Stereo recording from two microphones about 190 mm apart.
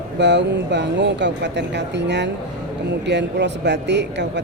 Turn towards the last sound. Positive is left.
turn(degrees=-65)  # may be behind; listen again after turning